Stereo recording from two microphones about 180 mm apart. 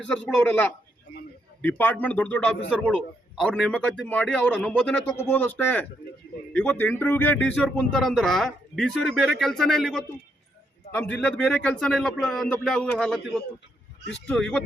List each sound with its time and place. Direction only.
0.0 s a man's voice: 5° left (ahead or behind)